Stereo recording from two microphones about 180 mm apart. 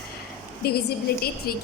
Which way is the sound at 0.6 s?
60° left (ahead or behind).